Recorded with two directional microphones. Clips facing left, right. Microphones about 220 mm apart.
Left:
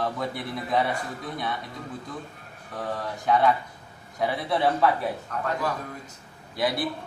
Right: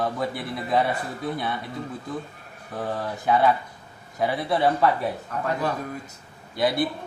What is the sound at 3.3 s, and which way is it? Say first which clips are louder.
Speech: right 1 dB; 5° right (ahead or behind).